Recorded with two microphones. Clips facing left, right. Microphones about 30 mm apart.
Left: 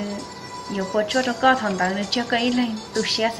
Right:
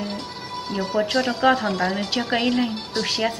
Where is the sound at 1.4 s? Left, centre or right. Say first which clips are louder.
Left 1 dB; centre.